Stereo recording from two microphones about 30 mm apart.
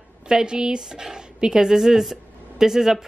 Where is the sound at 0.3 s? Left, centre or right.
Right.